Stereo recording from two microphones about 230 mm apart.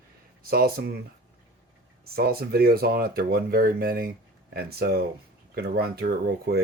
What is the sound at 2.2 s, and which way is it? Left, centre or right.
Speech, right.